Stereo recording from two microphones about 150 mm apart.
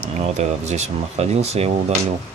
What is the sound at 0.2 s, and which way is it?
Speech, 50° right (ahead or behind).